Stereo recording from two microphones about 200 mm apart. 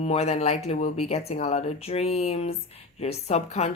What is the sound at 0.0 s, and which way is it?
A woman's voice, 30° left (ahead or behind).